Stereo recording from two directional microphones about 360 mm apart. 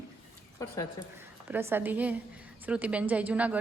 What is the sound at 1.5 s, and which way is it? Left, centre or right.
A woman's voice, centre.